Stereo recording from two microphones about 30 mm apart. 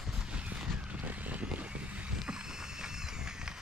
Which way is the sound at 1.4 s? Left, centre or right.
Right.